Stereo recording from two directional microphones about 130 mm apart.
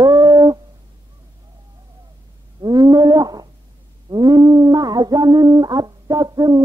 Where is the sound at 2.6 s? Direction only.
30° right (ahead or behind).